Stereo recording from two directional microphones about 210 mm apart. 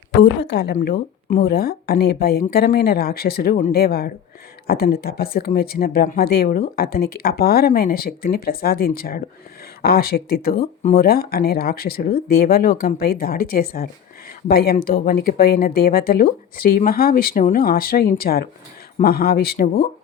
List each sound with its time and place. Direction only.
0.1 s speech: 55° left (ahead or behind)